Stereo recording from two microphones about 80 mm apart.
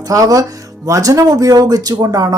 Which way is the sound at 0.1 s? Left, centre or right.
Right.